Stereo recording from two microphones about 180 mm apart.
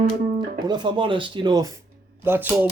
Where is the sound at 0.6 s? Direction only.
25° right (ahead or behind).